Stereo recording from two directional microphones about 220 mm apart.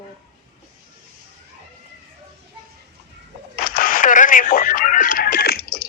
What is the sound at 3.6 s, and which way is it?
Radio, 40° left (ahead or behind).